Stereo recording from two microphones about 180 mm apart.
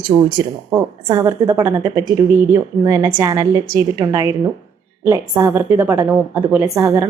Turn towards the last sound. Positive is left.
turn(degrees=-15)  # may be behind; listen again after turning